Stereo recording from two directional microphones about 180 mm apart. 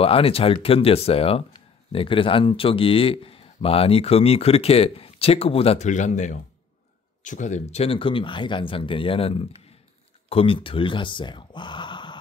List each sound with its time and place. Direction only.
0.0 s speech: 30° left (ahead or behind)